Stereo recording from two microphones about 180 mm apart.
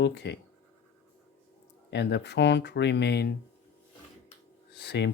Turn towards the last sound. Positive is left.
turn(degrees=70)  # may be behind; listen again after turning